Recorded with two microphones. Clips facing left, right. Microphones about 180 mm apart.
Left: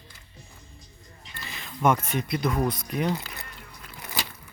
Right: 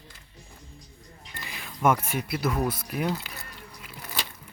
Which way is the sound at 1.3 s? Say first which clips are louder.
Left 1 dB; 15° right (ahead or behind).